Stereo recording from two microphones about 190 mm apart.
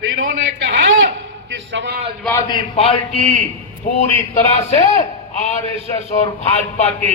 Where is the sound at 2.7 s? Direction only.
30° left (ahead or behind).